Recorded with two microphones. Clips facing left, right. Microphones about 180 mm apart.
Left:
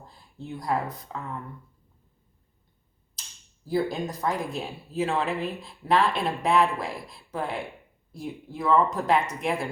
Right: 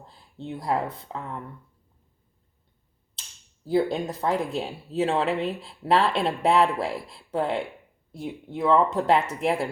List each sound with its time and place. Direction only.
0.0 s a sound: 30° right (ahead or behind)
0.5 s speech: 25° right (ahead or behind)
3.6 s speech: 25° right (ahead or behind)